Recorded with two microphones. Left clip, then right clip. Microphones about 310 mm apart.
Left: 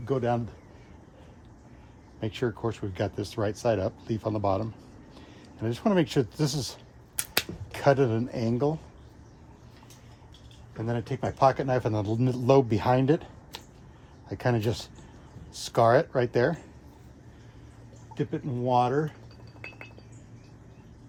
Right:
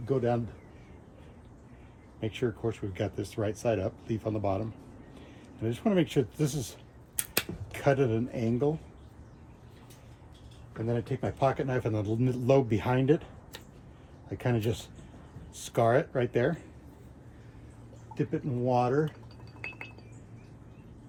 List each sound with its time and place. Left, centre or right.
0.0 s speech: centre
2.2 s speech: left
10.8 s speech: centre
14.3 s speech: left
18.1 s speech: centre